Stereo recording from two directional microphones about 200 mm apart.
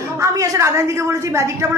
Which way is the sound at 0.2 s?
15° right (ahead or behind).